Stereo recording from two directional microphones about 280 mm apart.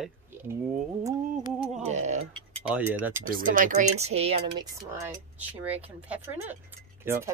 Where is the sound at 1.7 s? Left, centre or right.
Right.